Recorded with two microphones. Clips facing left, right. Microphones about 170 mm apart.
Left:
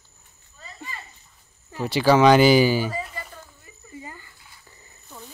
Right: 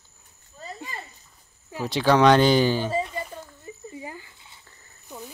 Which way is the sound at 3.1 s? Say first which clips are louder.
Right 6 dB; 25° right (ahead or behind).